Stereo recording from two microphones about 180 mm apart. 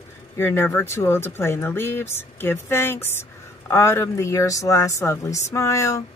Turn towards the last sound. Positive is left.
turn(degrees=15)  # may be behind; listen again after turning